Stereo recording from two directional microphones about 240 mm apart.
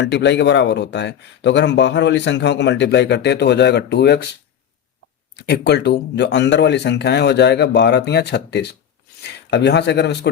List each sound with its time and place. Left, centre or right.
0.0 s speech: left
5.4 s speech: left